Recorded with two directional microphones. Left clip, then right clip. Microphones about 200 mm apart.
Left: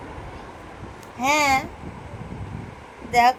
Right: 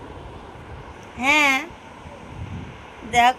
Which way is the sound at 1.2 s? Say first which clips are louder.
Right 2 dB; centre (ahead or behind).